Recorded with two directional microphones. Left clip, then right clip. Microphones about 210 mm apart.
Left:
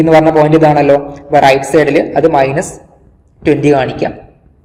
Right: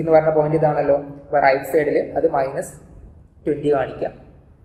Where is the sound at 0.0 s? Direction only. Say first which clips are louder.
Left 8 dB; 40° left (ahead or behind).